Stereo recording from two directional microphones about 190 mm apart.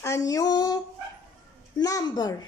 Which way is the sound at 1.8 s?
20° left (ahead or behind).